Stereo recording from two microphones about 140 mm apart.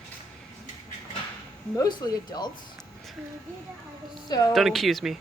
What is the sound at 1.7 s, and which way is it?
Speech, 25° left (ahead or behind).